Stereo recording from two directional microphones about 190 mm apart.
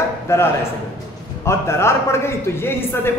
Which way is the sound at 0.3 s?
15° left (ahead or behind).